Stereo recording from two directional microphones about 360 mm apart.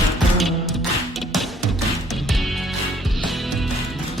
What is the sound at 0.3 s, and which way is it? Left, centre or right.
Music, centre.